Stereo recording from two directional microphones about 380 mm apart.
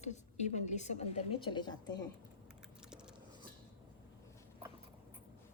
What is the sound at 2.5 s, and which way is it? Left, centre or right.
Typing, centre.